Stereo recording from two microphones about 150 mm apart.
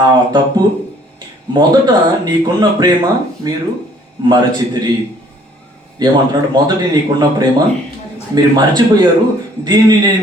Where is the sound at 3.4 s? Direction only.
25° right (ahead or behind).